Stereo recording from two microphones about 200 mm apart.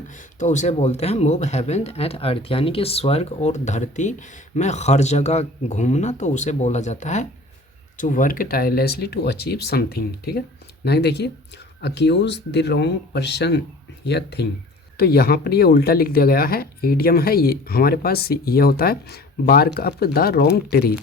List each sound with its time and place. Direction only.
0.1 s speech: 40° left (ahead or behind)